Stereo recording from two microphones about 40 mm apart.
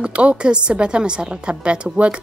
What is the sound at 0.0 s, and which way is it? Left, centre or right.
A woman's voice, right.